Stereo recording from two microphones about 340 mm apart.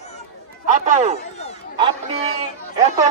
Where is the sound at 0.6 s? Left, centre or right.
Right.